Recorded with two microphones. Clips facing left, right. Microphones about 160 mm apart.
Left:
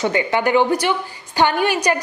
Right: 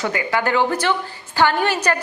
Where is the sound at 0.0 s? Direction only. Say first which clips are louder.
Left 3 dB; 25° left (ahead or behind).